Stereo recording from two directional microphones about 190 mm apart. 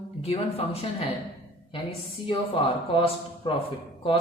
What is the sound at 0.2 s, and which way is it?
Speech, 35° left (ahead or behind).